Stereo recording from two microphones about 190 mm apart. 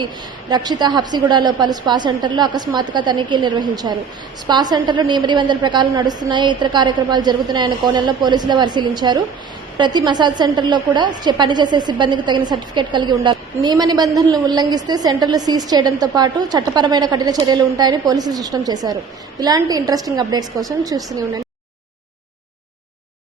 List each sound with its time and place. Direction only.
0.5 s a woman's voice: 20° right (ahead or behind)